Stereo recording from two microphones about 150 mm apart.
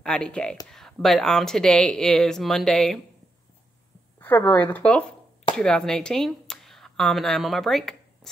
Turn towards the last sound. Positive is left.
turn(degrees=5)  # may be behind; listen again after turning